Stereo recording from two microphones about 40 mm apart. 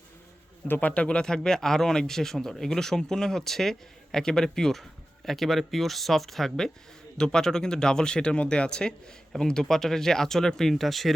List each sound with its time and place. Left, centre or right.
0.8 s speech: left
8.9 s speech: centre